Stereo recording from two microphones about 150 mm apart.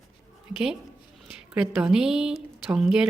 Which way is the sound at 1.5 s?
5° right (ahead or behind).